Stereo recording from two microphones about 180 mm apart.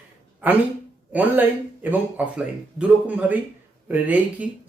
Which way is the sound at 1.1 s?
10° right (ahead or behind).